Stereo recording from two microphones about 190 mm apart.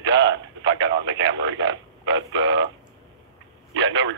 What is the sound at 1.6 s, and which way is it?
Speech, 80° right.